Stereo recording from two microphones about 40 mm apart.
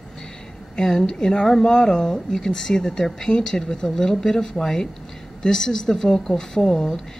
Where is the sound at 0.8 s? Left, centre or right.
Centre.